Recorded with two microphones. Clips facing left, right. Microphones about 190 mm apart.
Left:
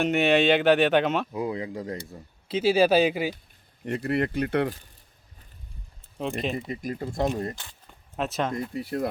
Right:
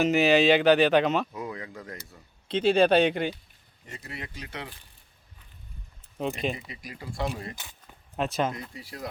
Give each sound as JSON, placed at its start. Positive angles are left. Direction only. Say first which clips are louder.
{"t": 0.0, "sound": "speech", "louder": "even", "side_deg": 0}
{"t": 1.3, "sound": "speech", "louder": "left 7 dB", "side_deg": 25}
{"t": 2.5, "sound": "speech", "louder": "left 1 dB", "side_deg": 5}
{"t": 3.8, "sound": "speech", "louder": "left 15 dB", "side_deg": 60}
{"t": 6.1, "sound": "speech", "louder": "left 1 dB", "side_deg": 0}
{"t": 6.6, "sound": "speech", "louder": "left 11 dB", "side_deg": 50}
{"t": 7.5, "sound": "speech", "louder": "left 1 dB", "side_deg": -10}
{"t": 8.7, "sound": "speech", "louder": "left 11 dB", "side_deg": 55}